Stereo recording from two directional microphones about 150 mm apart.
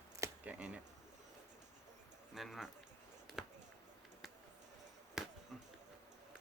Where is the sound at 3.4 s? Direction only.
5° right (ahead or behind).